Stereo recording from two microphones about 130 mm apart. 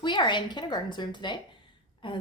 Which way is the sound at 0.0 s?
35° left (ahead or behind).